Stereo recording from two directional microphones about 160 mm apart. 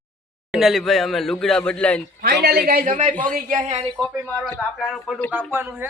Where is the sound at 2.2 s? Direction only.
70° right (ahead or behind); by 3.9 s 50° right (ahead or behind).